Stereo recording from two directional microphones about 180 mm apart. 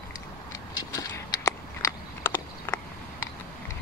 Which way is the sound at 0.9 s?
15° left (ahead or behind).